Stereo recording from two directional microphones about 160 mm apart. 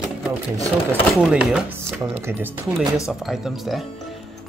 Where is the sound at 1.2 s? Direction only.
5° right (ahead or behind).